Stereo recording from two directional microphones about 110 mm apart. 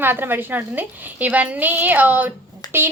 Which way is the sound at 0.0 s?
20° right (ahead or behind).